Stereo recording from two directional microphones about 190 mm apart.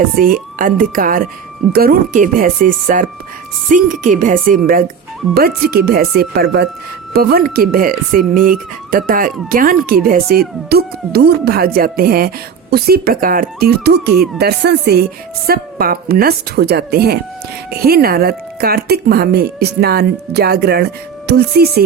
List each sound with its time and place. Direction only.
0.2 s speech: 50° right (ahead or behind)